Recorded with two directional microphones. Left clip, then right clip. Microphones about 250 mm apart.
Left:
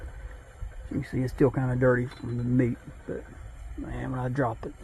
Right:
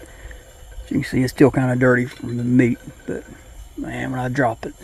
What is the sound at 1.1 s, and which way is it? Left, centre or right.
Speech, right.